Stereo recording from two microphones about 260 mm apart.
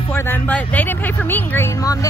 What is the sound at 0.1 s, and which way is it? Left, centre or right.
Speech, centre.